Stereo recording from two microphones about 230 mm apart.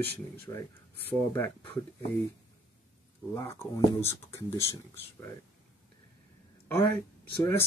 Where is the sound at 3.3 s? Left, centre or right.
Centre.